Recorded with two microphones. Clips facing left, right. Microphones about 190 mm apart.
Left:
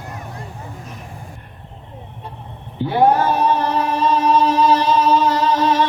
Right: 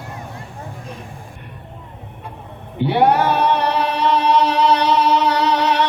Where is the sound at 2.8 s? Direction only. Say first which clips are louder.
Even; 75° right (ahead or behind).